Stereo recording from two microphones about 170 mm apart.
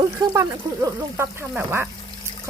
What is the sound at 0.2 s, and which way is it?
Speech, 20° right (ahead or behind).